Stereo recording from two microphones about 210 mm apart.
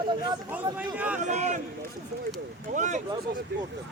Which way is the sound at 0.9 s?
5° right (ahead or behind).